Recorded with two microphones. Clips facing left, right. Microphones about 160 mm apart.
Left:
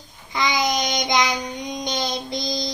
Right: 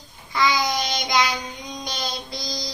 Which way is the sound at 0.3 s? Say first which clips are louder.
Even; 20° left (ahead or behind).